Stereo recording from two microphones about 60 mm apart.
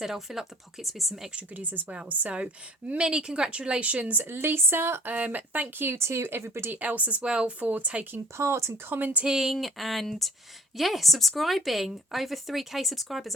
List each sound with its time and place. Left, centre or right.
0.0 s speech: centre
1.4 s speech: right
4.2 s speech: right
5.1 s speech: right
5.8 s speech: right
6.7 s speech: right
8.1 s speech: right
9.0 s speech: right
9.2 s speech: centre